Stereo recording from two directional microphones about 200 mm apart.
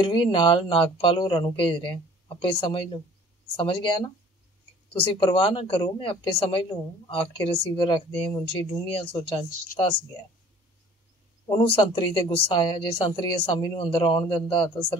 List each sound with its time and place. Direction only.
0.0 s speech: 25° left (ahead or behind)
11.4 s speech: 25° left (ahead or behind)